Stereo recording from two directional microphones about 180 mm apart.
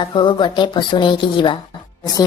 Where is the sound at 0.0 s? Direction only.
30° left (ahead or behind).